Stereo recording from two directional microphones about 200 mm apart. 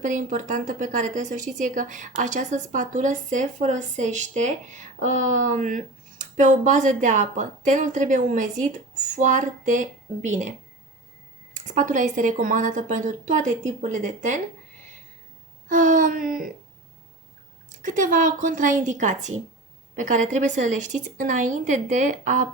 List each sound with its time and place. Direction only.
0.0 s a woman's voice: 40° right (ahead or behind)
11.5 s a woman's voice: 40° right (ahead or behind)
15.7 s a woman's voice: 40° right (ahead or behind)
17.7 s a woman's voice: 40° right (ahead or behind)